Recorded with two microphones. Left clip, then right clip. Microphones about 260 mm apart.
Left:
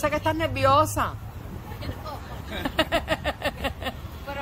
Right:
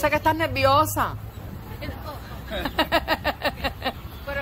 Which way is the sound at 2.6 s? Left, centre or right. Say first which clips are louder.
Right 2 dB; centre.